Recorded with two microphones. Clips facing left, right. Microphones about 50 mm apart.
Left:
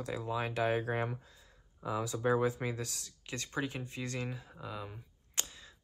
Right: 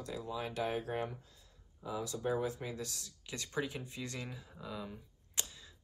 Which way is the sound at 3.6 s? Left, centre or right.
Centre.